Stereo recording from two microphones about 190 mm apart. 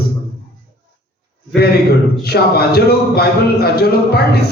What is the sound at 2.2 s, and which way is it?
Speech, 55° left (ahead or behind).